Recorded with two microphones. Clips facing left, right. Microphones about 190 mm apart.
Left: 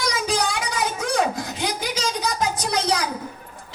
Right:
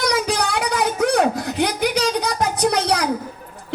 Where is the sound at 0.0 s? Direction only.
65° right (ahead or behind).